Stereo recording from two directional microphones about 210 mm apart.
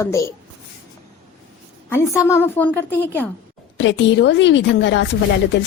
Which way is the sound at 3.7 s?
55° left (ahead or behind).